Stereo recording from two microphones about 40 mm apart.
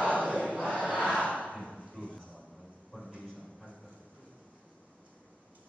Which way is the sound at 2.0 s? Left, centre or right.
Left.